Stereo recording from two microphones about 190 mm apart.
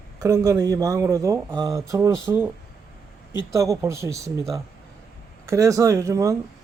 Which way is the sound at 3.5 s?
15° right (ahead or behind).